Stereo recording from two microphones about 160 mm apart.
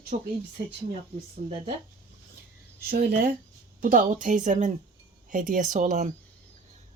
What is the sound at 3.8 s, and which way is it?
Speech, 60° right (ahead or behind).